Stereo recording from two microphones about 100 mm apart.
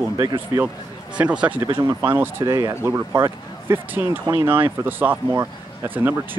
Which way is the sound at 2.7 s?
20° right (ahead or behind).